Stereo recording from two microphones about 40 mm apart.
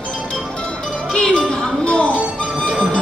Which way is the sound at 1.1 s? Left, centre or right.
Left.